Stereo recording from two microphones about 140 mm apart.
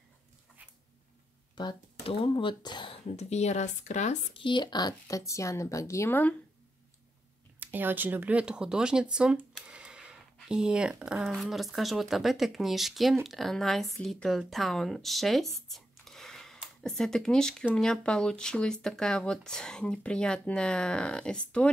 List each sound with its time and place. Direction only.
1.5 s speech: 30° left (ahead or behind)
3.2 s speech: 50° left (ahead or behind)
4.3 s a woman's voice: 35° left (ahead or behind); by 6.3 s 15° left (ahead or behind)
7.6 s speech: 15° right (ahead or behind); by 21.6 s 5° left (ahead or behind)